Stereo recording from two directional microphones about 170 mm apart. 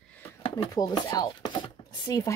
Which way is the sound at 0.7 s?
25° left (ahead or behind).